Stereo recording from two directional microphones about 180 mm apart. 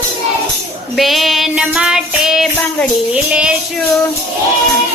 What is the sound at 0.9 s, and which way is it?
Child singing, centre (ahead or behind).